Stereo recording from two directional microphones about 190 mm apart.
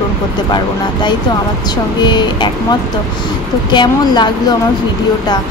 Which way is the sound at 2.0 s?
25° left (ahead or behind).